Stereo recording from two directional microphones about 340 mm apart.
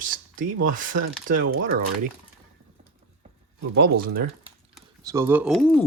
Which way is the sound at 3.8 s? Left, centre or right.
Right.